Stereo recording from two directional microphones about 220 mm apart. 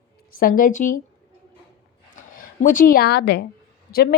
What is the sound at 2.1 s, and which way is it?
Speech, 35° left (ahead or behind).